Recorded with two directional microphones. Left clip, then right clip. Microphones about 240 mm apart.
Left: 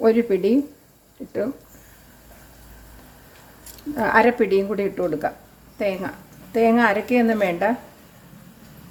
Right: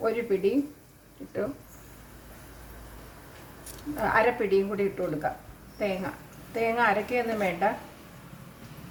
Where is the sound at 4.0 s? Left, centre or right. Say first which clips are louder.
Left 7 dB; left.